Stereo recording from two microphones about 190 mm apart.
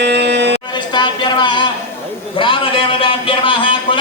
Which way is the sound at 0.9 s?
25° left (ahead or behind).